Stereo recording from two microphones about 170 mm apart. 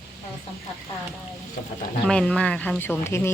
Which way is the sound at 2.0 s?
5° left (ahead or behind).